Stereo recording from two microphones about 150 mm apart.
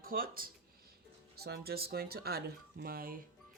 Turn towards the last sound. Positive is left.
turn(degrees=-75)  # may be behind; listen again after turning